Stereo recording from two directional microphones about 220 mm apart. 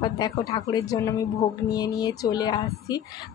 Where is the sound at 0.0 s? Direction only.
20° left (ahead or behind).